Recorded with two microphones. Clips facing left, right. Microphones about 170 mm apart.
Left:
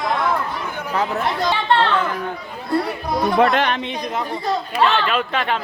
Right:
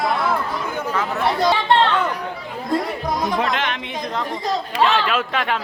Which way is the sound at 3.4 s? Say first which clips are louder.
Left 6 dB; 45° left (ahead or behind).